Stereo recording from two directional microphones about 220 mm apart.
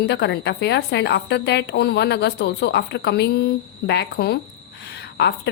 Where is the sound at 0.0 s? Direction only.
50° left (ahead or behind).